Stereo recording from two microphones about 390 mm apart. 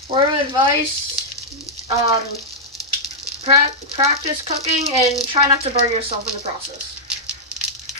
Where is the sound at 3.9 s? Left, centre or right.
Centre.